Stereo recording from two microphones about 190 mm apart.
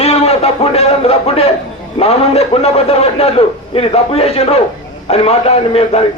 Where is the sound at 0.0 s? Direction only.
35° left (ahead or behind).